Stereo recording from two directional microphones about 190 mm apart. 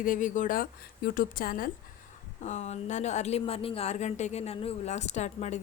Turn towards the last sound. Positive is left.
turn(degrees=35)  # may be behind; listen again after turning